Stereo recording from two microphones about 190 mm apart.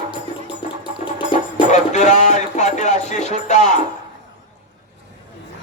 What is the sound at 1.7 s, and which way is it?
Music, 40° left (ahead or behind).